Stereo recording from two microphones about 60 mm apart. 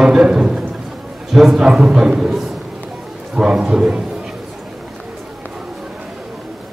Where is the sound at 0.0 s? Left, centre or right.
Centre.